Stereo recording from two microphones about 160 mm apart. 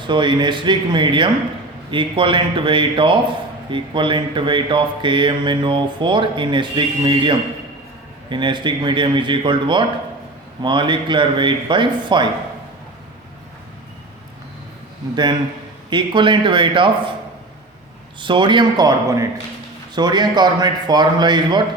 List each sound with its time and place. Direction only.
0.0 s a man's voice: 30° right (ahead or behind)
15.1 s a man's voice: 25° right (ahead or behind)
18.2 s speech: 30° right (ahead or behind)